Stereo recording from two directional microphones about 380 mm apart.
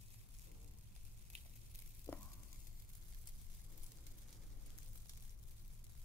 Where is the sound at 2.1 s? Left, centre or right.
Centre.